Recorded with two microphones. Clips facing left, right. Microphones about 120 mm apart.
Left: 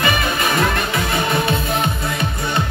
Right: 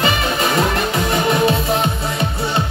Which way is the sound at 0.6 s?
35° right (ahead or behind).